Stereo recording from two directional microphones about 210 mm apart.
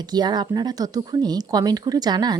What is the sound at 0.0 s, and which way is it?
Speech, 20° right (ahead or behind).